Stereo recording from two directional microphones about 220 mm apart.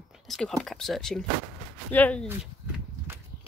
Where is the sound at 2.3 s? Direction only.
10° right (ahead or behind).